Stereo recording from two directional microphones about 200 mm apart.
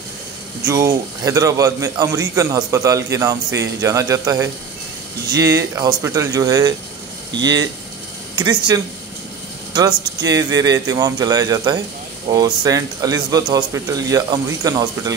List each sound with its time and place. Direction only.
0.7 s a man's voice: 15° right (ahead or behind)
10.2 s a man's voice: 15° right (ahead or behind)